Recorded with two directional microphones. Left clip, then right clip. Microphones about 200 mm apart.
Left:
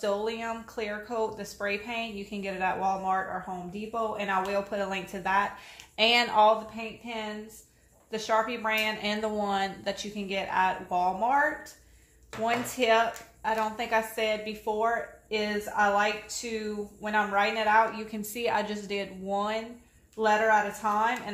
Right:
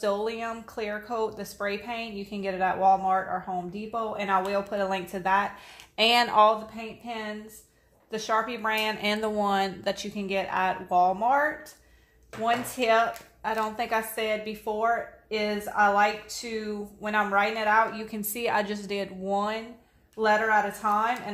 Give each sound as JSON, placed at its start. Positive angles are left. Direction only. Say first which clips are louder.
{"t": 0.0, "sound": "a woman's voice", "louder": "right 2 dB", "side_deg": -30}
{"t": 8.1, "sound": "a woman's voice", "louder": "even", "side_deg": -30}
{"t": 12.4, "sound": "a woman's voice", "louder": "right 1 dB", "side_deg": -30}